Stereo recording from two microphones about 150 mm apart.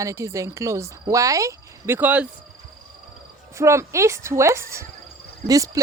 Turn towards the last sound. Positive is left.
turn(degrees=-20)  # may be behind; listen again after turning